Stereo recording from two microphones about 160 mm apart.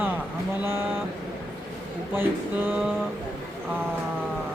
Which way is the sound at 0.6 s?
15° right (ahead or behind).